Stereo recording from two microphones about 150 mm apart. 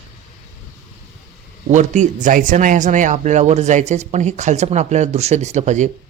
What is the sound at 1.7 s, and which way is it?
Speech, 55° right (ahead or behind).